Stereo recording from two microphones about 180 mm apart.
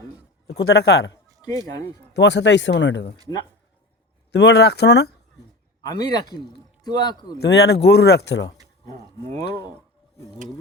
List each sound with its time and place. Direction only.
0.4 s speech: 65° left (ahead or behind)
2.1 s speech: 70° left (ahead or behind)
4.3 s speech: 70° left (ahead or behind)
5.8 s a man's voice: 20° left (ahead or behind)
7.3 s speech: 65° left (ahead or behind)